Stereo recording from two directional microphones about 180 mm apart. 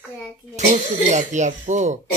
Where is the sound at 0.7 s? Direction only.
40° right (ahead or behind).